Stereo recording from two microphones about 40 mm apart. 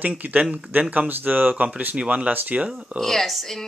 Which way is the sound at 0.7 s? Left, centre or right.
Right.